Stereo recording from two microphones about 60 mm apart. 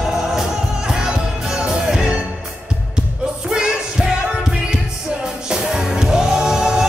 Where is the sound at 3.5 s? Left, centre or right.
Centre.